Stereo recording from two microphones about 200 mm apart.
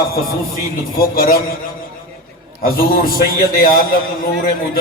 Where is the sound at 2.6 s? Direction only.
45° left (ahead or behind).